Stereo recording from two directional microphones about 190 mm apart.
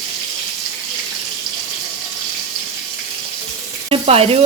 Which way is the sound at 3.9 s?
30° right (ahead or behind).